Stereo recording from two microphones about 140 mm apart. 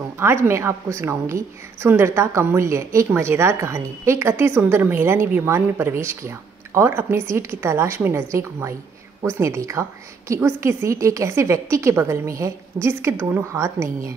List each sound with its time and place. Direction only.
0.2 s a woman's voice: 20° right (ahead or behind)